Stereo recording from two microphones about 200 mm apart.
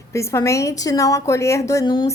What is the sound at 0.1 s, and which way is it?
A woman's voice, 15° left (ahead or behind).